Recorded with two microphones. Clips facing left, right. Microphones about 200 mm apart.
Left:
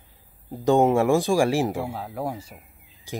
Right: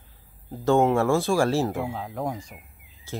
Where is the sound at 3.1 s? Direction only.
15° left (ahead or behind).